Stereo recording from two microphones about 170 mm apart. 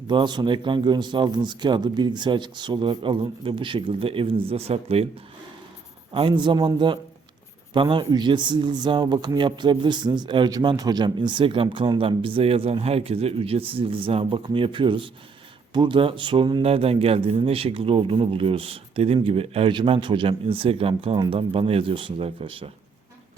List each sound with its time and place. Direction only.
0.1 s speech: 25° right (ahead or behind)
6.1 s speech: 30° right (ahead or behind)